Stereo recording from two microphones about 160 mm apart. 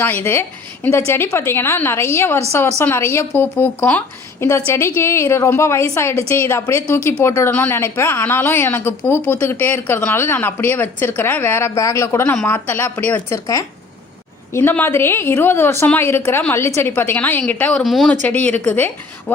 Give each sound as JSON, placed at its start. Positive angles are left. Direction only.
{"t": 0.9, "sound": "a woman's voice", "side_deg": 15}
{"t": 14.5, "sound": "a woman's voice", "side_deg": 10}